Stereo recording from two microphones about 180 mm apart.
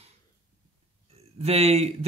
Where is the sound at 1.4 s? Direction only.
35° right (ahead or behind).